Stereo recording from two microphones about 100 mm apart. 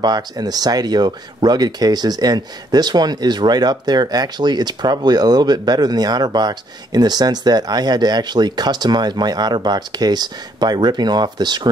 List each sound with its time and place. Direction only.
0.0 s speech: 40° right (ahead or behind)